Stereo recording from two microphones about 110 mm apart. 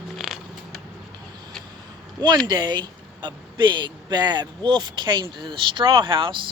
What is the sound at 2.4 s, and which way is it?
Speech, 40° right (ahead or behind).